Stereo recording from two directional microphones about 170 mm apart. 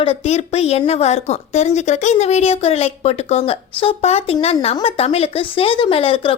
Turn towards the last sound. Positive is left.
turn(degrees=30)  # may be behind; listen again after turning